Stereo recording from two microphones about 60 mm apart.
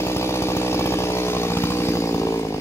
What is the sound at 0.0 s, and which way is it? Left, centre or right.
Chainsaw, left.